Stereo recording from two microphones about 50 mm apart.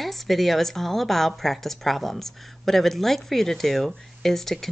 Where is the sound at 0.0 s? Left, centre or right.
Centre.